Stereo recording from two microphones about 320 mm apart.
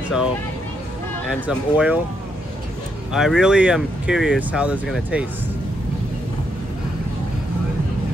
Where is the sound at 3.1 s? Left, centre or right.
Centre.